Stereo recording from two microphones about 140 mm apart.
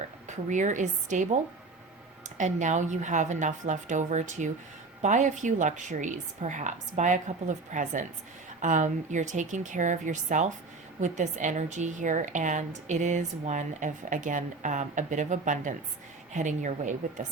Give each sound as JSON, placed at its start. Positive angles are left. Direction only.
{"t": 0.3, "sound": "a woman's voice", "side_deg": -60}